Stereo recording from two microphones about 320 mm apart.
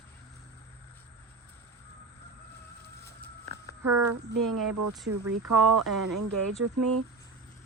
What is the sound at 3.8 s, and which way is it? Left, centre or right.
Speech, right.